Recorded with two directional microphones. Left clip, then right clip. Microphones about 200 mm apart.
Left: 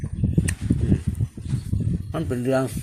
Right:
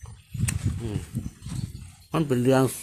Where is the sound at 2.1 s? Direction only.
25° right (ahead or behind).